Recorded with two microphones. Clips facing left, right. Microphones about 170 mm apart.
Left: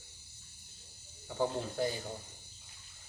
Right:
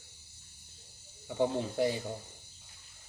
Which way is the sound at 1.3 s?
25° right (ahead or behind).